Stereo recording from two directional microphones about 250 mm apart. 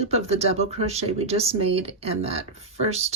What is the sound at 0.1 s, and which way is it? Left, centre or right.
Speech, right.